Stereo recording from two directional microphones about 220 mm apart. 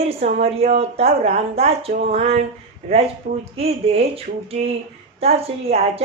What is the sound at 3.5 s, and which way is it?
A woman's voice, 25° right (ahead or behind).